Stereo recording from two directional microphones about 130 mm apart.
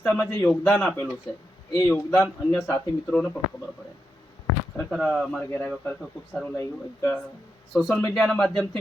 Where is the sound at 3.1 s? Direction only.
5° left (ahead or behind).